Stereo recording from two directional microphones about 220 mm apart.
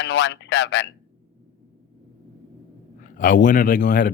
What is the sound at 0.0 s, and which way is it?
Speech, 50° left (ahead or behind).